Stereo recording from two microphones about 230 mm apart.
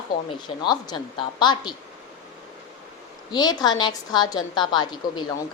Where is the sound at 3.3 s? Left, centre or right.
Centre.